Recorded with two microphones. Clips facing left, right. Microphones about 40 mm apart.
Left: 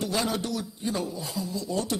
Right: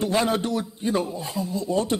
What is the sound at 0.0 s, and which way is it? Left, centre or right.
A man's voice, right.